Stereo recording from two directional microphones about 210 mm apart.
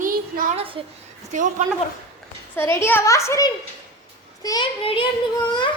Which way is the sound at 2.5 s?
10° left (ahead or behind).